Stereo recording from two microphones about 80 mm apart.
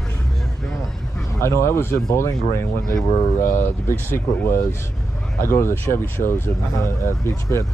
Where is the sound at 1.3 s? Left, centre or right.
Left.